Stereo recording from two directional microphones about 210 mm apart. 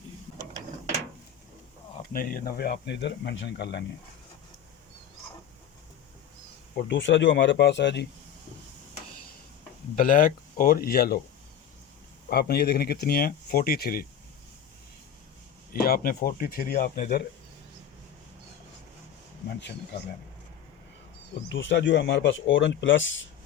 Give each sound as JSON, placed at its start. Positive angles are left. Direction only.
{"t": 2.1, "sound": "speech", "side_deg": 40}
{"t": 6.7, "sound": "speech", "side_deg": 55}
{"t": 9.9, "sound": "speech", "side_deg": 40}
{"t": 12.3, "sound": "speech", "side_deg": 50}
{"t": 15.7, "sound": "speech", "side_deg": 45}
{"t": 19.5, "sound": "speech", "side_deg": 50}
{"t": 21.5, "sound": "speech", "side_deg": 60}